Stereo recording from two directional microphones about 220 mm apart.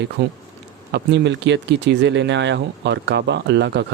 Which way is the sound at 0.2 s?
55° right (ahead or behind).